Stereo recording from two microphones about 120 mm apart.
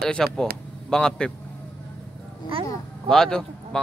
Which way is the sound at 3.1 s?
5° left (ahead or behind).